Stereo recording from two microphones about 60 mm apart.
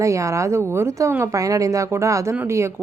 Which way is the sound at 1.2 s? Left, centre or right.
Right.